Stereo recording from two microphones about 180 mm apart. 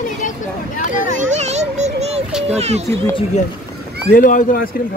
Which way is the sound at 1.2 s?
40° right (ahead or behind).